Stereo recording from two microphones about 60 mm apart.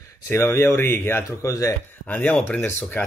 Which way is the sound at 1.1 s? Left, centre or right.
Left.